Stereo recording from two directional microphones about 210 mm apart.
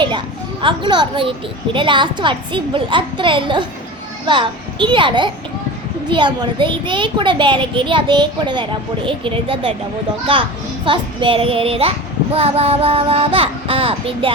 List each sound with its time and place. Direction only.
0.6 s a child's voice: 25° right (ahead or behind)